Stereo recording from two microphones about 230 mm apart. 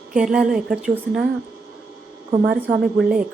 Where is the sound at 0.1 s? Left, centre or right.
Centre.